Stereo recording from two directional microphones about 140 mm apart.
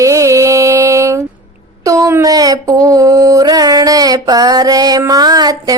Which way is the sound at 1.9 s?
20° right (ahead or behind).